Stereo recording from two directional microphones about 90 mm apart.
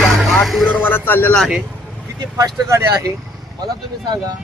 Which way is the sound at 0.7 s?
20° left (ahead or behind).